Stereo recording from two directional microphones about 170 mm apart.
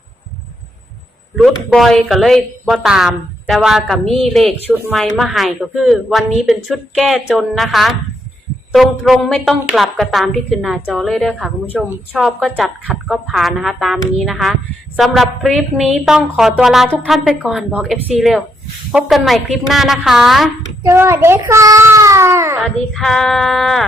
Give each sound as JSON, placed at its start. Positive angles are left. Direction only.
{"t": 1.4, "sound": "a woman's voice", "side_deg": 0}
{"t": 12.1, "sound": "a woman's voice", "side_deg": 0}
{"t": 20.8, "sound": "a child's voice", "side_deg": -15}
{"t": 22.6, "sound": "a woman's voice", "side_deg": 5}